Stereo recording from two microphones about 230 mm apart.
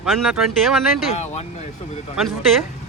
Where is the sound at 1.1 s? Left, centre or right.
Left.